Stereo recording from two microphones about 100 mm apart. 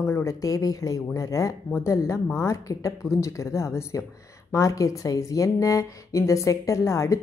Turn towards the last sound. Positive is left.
turn(degrees=30)  # may be behind; listen again after turning